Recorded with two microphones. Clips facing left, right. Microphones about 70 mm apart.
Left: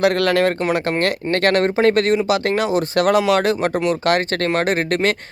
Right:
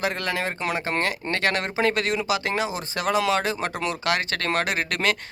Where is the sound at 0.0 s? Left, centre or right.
Left.